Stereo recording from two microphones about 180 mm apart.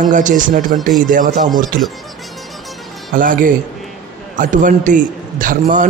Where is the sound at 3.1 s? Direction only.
50° right (ahead or behind).